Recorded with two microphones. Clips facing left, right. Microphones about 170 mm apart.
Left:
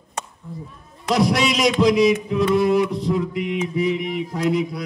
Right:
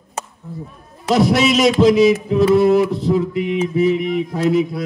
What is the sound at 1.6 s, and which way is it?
Mantra, 25° right (ahead or behind).